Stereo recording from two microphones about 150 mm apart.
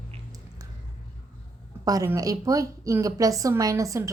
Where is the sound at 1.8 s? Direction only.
20° right (ahead or behind).